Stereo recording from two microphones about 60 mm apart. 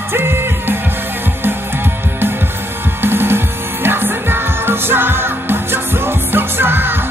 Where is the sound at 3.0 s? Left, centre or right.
Right.